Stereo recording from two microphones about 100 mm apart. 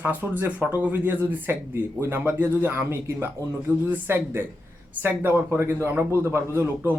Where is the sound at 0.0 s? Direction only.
15° right (ahead or behind).